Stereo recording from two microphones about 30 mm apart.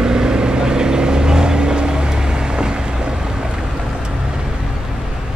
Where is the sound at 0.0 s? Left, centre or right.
Right.